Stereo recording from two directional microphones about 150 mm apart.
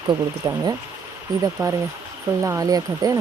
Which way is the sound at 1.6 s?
25° right (ahead or behind).